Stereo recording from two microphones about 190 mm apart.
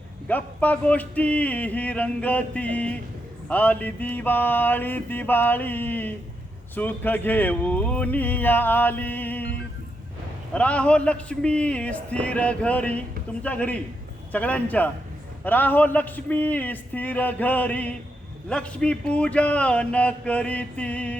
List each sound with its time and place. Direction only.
0.3 s speech: 10° left (ahead or behind)
10.5 s speech: 5° left (ahead or behind)